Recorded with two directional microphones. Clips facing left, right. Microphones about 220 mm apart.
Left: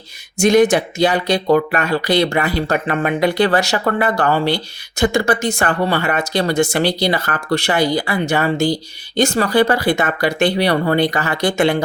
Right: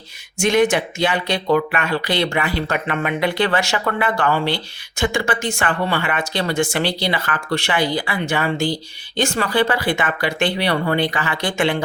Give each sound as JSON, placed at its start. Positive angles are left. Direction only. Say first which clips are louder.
{"t": 0.3, "sound": "speech", "louder": "left 4 dB", "side_deg": 40}